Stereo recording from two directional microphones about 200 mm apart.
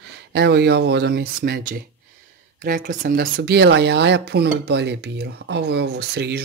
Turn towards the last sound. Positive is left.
turn(degrees=-55)  # may be behind; listen again after turning